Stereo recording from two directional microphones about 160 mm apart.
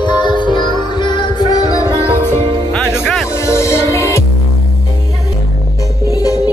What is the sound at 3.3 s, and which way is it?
Music, 15° left (ahead or behind).